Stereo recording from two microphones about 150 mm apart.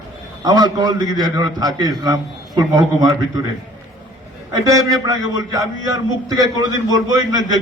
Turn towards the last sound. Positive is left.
turn(degrees=-25)  # may be behind; listen again after turning